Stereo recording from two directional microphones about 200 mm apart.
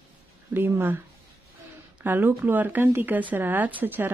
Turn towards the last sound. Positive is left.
turn(degrees=-10)  # may be behind; listen again after turning